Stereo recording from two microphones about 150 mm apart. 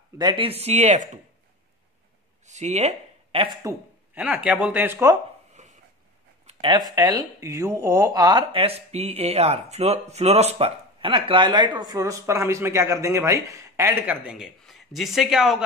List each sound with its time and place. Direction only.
0.2 s speech: 30° right (ahead or behind)
0.5 s speech: 45° right (ahead or behind)
2.4 s speech: 50° right (ahead or behind)
3.6 s speech: 10° right (ahead or behind)
5.5 s a sound: 55° right (ahead or behind)
6.4 s speech: 35° right (ahead or behind); by 15.6 s centre (ahead or behind)